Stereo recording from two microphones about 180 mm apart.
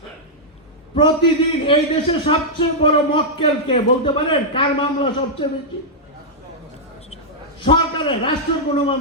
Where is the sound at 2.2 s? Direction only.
30° left (ahead or behind).